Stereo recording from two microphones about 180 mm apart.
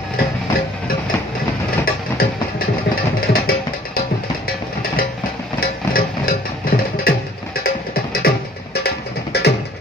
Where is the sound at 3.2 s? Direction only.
55° left (ahead or behind).